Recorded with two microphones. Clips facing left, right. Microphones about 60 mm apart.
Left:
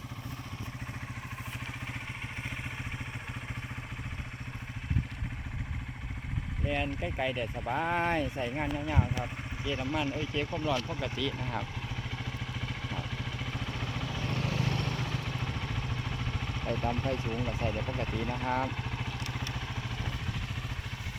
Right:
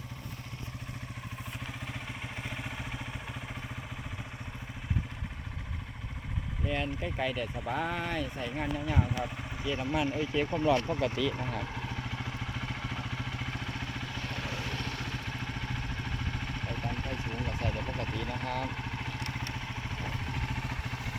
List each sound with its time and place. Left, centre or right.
6.7 s speech: centre
7.9 s speech: left
8.6 s speech: centre
9.6 s speech: centre
10.5 s speech: centre
11.0 s speech: centre
12.6 s vehicle: centre
16.8 s speech: centre
18.0 s speech: left